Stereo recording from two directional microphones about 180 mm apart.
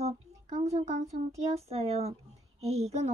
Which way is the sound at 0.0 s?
35° right (ahead or behind).